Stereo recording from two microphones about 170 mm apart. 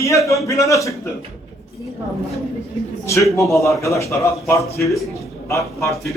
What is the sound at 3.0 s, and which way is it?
A man's voice, 15° left (ahead or behind).